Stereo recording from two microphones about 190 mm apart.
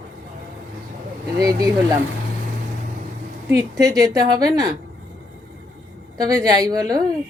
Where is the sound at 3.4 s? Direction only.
20° right (ahead or behind).